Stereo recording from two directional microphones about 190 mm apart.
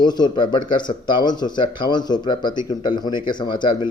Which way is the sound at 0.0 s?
20° left (ahead or behind).